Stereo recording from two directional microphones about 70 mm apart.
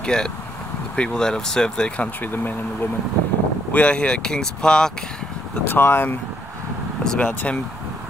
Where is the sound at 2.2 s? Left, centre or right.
Left.